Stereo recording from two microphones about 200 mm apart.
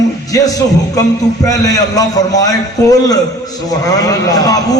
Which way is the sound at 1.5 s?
20° left (ahead or behind).